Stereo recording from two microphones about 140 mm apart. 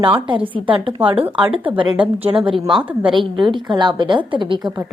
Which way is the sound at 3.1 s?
35° right (ahead or behind).